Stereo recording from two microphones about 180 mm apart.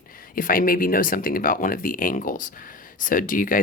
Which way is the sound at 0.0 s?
50° left (ahead or behind).